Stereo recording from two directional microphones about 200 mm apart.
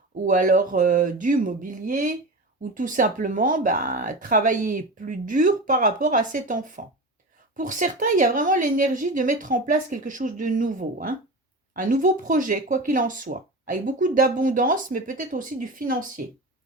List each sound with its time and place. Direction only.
0.3 s speech: 40° right (ahead or behind)